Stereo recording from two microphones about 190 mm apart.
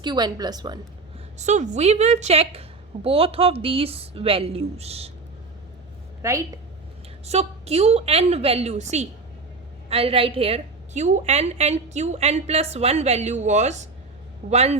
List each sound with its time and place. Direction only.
0.0 s a woman's voice: 25° right (ahead or behind)
1.4 s a woman's voice: 40° right (ahead or behind)
6.2 s a woman's voice: 15° right (ahead or behind)
7.3 s a woman's voice: 35° right (ahead or behind)